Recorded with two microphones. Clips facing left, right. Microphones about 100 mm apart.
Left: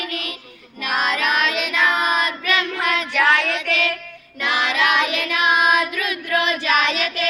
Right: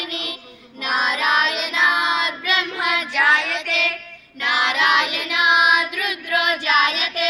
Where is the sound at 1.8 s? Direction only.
15° right (ahead or behind).